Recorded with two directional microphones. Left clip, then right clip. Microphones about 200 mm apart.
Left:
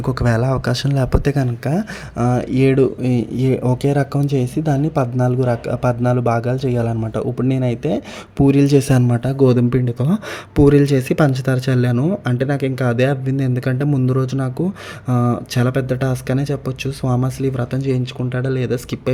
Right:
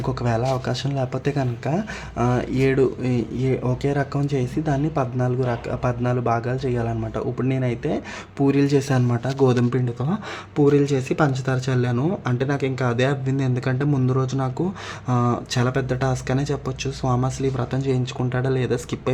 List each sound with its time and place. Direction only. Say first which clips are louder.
0.0 s speech: left 4 dB; 40° left (ahead or behind); by 19.1 s 25° left (ahead or behind)